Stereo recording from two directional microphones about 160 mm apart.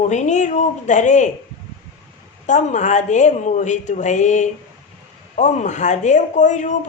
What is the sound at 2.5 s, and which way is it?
A woman's voice, 50° left (ahead or behind).